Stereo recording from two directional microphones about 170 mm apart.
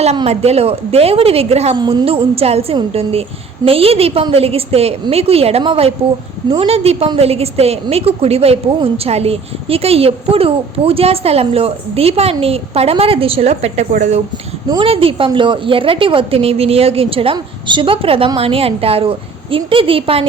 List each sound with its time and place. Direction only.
0.0 s a woman's voice: 40° right (ahead or behind)
14.7 s a woman's voice: 30° right (ahead or behind)